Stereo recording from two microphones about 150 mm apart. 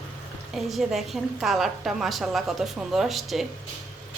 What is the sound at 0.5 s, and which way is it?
A woman's voice, centre (ahead or behind).